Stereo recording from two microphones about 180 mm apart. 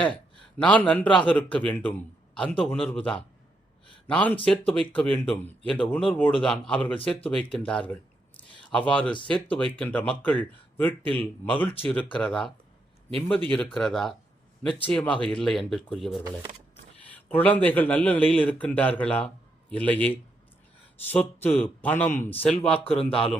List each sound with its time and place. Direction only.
0.6 s speech: 5° left (ahead or behind)
17.2 s speech: 10° left (ahead or behind)
22.8 s speech: 30° left (ahead or behind)